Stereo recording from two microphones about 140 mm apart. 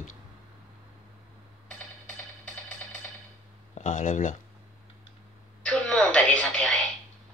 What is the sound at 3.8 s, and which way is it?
Speech, 60° left (ahead or behind).